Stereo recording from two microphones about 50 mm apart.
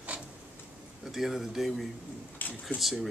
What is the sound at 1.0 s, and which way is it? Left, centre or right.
Speech, centre.